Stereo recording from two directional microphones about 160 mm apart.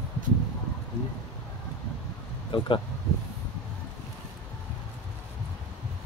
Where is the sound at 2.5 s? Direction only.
30° left (ahead or behind).